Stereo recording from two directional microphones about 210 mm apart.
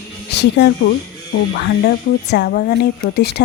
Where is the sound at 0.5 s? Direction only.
55° left (ahead or behind).